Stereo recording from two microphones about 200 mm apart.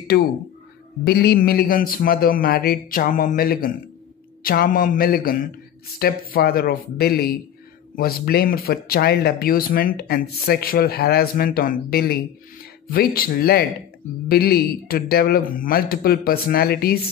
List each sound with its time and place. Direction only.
0.1 s speech: 55° left (ahead or behind)